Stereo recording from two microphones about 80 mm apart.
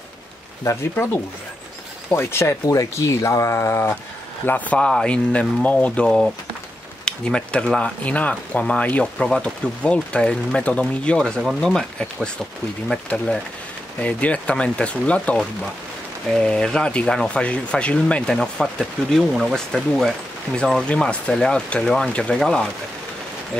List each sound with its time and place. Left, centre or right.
2.0 s speech: left
2.6 s speech: left
4.5 s speech: centre
14.0 s speech: centre